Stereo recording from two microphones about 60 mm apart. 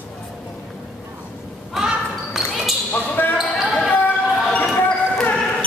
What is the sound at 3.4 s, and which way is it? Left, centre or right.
Basketball bounce, centre.